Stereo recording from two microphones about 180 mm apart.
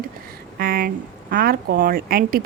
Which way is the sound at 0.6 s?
55° right (ahead or behind).